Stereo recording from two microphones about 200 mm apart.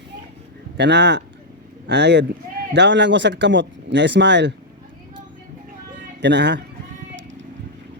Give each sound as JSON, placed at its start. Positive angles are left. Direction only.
{"t": 0.8, "sound": "speech", "side_deg": -60}
{"t": 6.2, "sound": "speech", "side_deg": -60}